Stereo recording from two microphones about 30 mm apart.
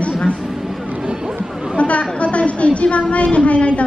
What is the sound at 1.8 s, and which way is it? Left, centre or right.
Chatter, left.